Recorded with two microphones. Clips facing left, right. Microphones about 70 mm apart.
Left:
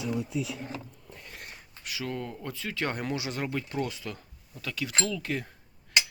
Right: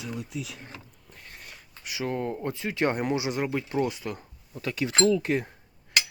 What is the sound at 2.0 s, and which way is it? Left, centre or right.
Speech, right.